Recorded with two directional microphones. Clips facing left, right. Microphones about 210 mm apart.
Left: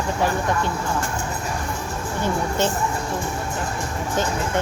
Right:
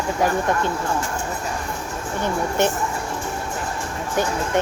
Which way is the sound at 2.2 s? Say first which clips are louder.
Right 2 dB; 15° right (ahead or behind).